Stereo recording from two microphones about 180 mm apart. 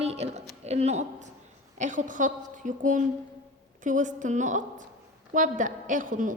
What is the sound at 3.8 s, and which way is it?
A woman's voice, 45° right (ahead or behind).